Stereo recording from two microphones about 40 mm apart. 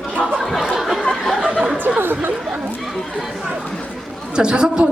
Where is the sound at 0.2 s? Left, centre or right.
Centre.